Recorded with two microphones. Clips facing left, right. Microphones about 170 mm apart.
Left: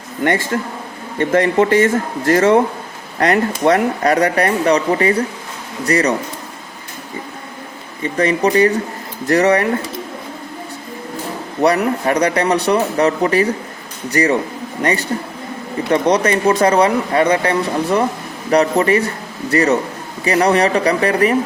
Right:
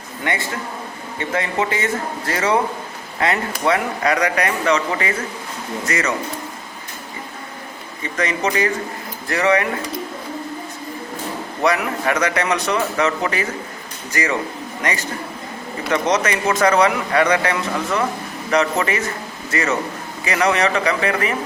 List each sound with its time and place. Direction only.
0.5 s a man's voice: 55° left (ahead or behind); by 6.1 s 35° left (ahead or behind)
8.1 s speech: 30° left (ahead or behind)
11.6 s speech: 35° left (ahead or behind)
16.1 s speech: 35° left (ahead or behind)